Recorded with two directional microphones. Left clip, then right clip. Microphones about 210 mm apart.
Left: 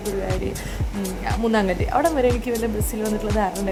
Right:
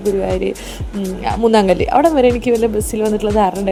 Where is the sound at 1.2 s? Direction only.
30° right (ahead or behind).